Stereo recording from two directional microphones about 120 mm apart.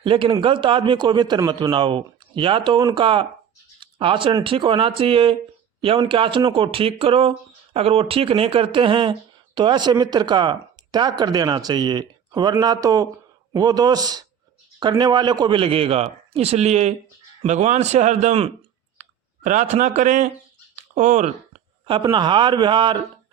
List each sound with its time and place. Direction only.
0.0 s speech: 45° right (ahead or behind); by 18.5 s 65° right (ahead or behind)
18.9 s speech: 90° right
22.1 s speech: 40° right (ahead or behind)